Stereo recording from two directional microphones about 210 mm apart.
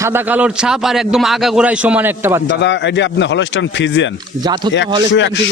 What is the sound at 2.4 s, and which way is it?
Speech, 55° left (ahead or behind).